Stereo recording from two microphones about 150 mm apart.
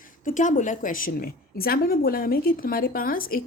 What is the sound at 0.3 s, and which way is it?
A woman's voice, 60° left (ahead or behind).